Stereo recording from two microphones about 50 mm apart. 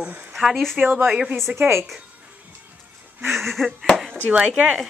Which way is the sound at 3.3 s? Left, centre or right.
Centre.